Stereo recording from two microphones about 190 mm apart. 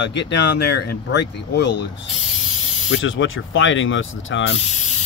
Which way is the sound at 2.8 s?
90° left.